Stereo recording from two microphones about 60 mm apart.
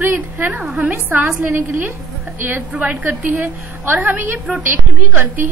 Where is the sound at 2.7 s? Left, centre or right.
Right.